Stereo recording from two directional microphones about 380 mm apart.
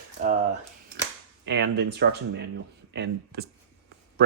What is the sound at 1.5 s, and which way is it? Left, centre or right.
Speech, right.